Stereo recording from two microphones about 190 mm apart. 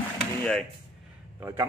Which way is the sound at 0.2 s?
5° left (ahead or behind).